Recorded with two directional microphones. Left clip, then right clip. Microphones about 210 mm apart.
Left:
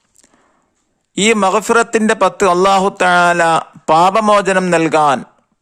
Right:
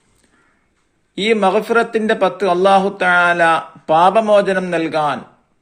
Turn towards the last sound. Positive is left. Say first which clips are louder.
# left 6 dB
turn(degrees=50)  # may be behind; listen again after turning